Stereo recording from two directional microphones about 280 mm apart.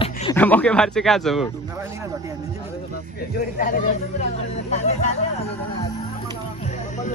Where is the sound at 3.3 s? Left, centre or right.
Left.